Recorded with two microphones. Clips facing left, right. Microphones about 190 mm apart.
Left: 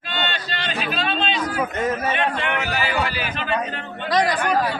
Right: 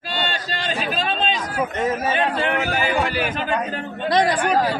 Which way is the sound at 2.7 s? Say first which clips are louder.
Right 2 dB; 50° right (ahead or behind).